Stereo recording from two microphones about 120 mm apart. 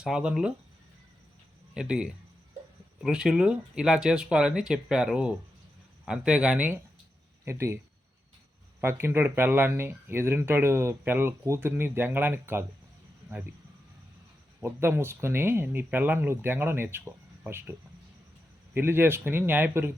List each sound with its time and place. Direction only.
0.0 s speech: 5° right (ahead or behind)
1.7 s speech: 5° right (ahead or behind)
8.8 s speech: 20° right (ahead or behind)
14.6 s speech: 20° right (ahead or behind)